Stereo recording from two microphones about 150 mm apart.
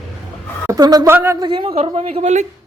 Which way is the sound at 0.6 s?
25° right (ahead or behind).